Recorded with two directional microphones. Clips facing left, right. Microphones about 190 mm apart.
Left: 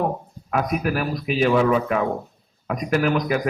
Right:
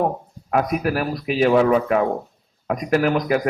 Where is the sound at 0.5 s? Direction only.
40° right (ahead or behind).